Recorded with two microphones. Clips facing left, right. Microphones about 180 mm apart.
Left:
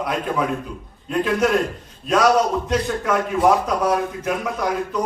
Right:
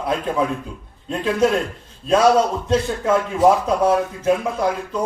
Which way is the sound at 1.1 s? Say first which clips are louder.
Even; 30° right (ahead or behind).